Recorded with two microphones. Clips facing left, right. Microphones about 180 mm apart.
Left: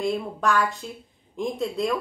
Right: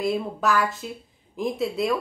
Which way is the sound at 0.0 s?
5° right (ahead or behind).